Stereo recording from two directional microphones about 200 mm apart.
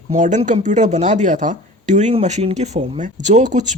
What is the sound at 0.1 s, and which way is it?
Speech, 40° right (ahead or behind).